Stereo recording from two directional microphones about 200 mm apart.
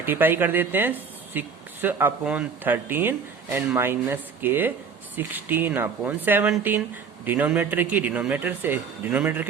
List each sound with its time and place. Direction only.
0.0 s speech: 10° right (ahead or behind)